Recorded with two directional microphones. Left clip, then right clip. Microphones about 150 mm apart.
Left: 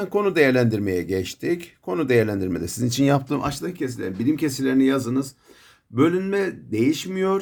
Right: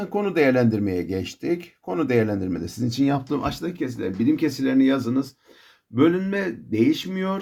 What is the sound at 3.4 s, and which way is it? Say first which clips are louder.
Speech: even; 25° left (ahead or behind).